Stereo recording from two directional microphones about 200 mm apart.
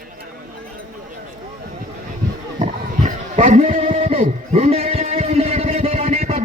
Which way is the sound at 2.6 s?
40° right (ahead or behind).